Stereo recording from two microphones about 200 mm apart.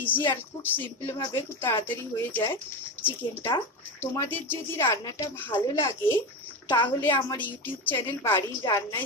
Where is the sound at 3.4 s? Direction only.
15° left (ahead or behind).